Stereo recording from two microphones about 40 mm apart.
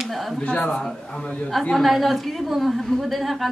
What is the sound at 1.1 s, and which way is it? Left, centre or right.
Speech, centre.